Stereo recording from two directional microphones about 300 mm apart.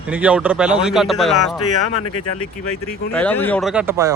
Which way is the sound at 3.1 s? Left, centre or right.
Centre.